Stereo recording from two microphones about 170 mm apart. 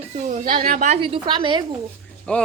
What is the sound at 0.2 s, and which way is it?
Speech, 45° right (ahead or behind).